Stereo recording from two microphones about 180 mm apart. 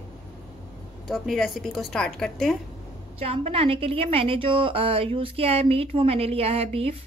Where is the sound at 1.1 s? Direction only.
Centre (ahead or behind).